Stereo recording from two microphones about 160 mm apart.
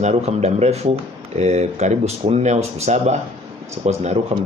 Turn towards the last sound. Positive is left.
turn(degrees=-45)  # may be behind; listen again after turning